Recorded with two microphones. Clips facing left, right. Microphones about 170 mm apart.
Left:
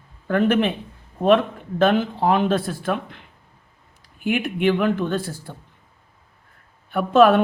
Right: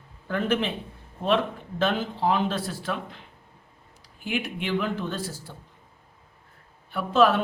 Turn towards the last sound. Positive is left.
turn(degrees=55)  # may be behind; listen again after turning